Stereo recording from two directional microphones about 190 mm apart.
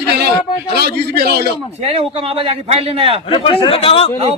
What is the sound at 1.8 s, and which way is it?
A man's voice, 30° right (ahead or behind).